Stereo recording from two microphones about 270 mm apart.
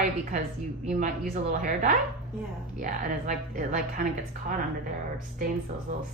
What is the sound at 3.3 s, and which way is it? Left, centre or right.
Speech, right.